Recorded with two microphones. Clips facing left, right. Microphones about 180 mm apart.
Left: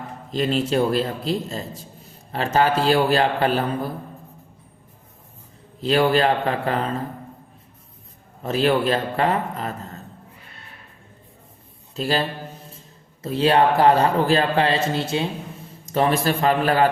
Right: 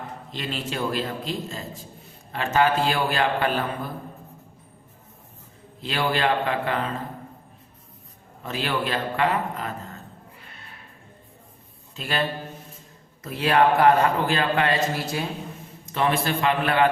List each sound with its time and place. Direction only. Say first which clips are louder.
0.3 s a man's voice: left 11 dB; 40° left (ahead or behind)
5.8 s a man's voice: left 6 dB; 40° left (ahead or behind)
8.4 s a man's voice: left 8 dB; 40° left (ahead or behind)
11.9 s a man's voice: left 6 dB; 35° left (ahead or behind)
13.2 s a man's voice: left 3 dB; 30° left (ahead or behind)
15.9 s a man's voice: left 4 dB; 40° left (ahead or behind)